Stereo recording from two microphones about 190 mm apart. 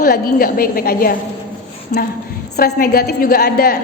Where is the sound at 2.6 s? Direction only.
50° left (ahead or behind).